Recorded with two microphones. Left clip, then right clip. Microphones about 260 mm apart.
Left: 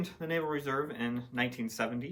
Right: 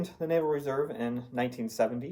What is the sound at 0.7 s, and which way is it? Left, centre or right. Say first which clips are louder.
Speech: right 3 dB; left.